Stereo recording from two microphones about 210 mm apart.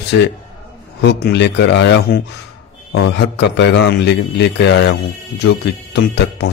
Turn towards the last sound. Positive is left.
turn(degrees=55)  # may be behind; listen again after turning